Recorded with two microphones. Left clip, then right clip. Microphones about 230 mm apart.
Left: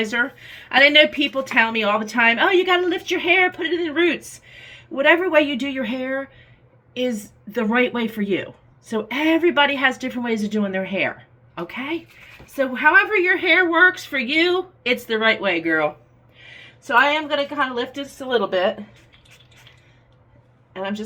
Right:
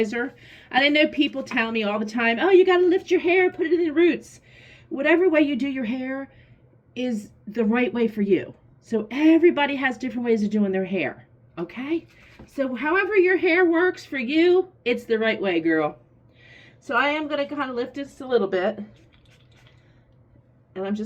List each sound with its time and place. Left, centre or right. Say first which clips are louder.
0.0 s a woman's voice: left 4 dB; centre
20.7 s speech: left 2 dB; centre